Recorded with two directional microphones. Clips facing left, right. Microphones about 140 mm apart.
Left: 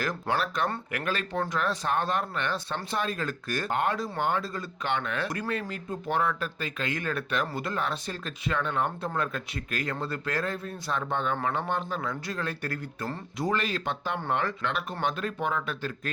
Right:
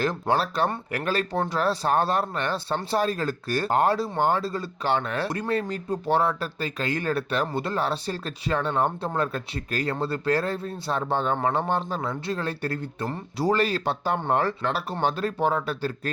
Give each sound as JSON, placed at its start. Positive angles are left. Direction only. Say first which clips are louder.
{"t": 0.0, "sound": "speech", "louder": "right 5 dB", "side_deg": -30}